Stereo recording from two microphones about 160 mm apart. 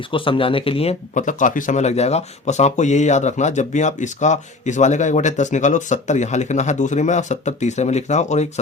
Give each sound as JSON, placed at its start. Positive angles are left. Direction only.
{"t": 0.1, "sound": "speech", "side_deg": 35}
{"t": 1.1, "sound": "speech", "side_deg": 50}